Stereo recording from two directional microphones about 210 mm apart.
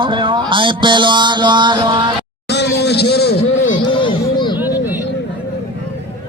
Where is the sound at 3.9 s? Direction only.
25° left (ahead or behind).